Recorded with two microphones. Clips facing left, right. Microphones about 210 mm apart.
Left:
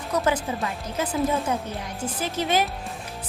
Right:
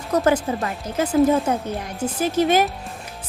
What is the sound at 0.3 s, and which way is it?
A woman's voice, 50° right (ahead or behind).